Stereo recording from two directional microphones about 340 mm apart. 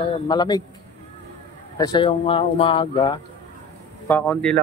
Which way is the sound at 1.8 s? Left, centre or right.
Centre.